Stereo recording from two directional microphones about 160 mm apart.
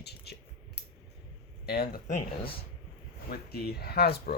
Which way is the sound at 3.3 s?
75° left (ahead or behind).